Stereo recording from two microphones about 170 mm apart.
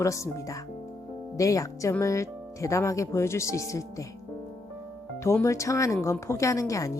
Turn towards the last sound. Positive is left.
turn(degrees=20)  # may be behind; listen again after turning